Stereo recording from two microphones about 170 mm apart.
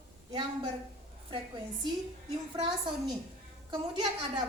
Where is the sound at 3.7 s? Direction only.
25° right (ahead or behind).